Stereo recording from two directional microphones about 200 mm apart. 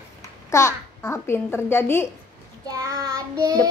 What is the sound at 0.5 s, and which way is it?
A child's voice, 15° left (ahead or behind).